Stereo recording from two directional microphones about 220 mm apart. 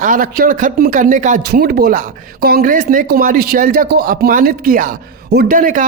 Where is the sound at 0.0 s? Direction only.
40° right (ahead or behind).